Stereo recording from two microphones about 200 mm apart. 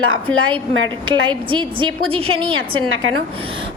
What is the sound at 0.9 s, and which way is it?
A woman's voice, 20° right (ahead or behind).